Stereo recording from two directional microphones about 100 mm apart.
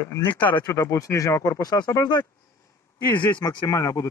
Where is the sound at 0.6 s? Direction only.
30° left (ahead or behind).